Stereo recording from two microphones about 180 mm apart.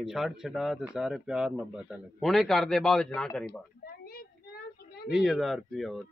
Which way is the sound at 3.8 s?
55° left (ahead or behind).